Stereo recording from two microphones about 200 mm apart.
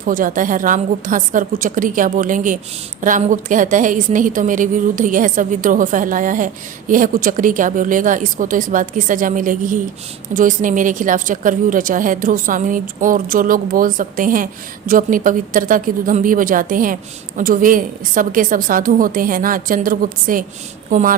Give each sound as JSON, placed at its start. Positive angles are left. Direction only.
{"t": 0.0, "sound": "a woman's voice", "side_deg": -45}